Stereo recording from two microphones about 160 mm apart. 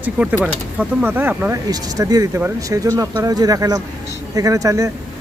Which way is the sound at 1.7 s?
20° right (ahead or behind).